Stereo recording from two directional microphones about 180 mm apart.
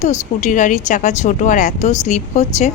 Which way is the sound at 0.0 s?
40° left (ahead or behind).